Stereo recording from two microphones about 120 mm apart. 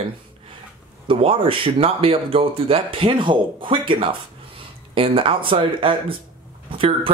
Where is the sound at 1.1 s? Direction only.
45° right (ahead or behind).